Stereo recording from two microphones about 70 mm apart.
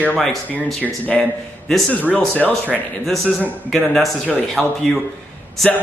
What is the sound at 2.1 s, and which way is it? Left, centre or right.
Speech, left.